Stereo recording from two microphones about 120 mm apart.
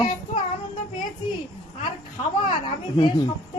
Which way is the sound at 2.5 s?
40° left (ahead or behind).